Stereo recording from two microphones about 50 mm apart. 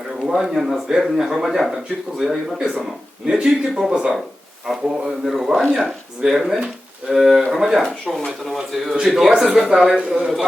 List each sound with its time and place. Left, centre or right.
0.2 s a man's voice: centre